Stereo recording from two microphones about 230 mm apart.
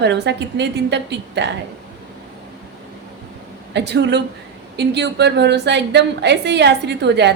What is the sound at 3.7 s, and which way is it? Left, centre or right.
A woman's voice, right.